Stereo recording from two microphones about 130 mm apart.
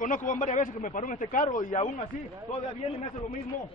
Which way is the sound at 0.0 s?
85° left.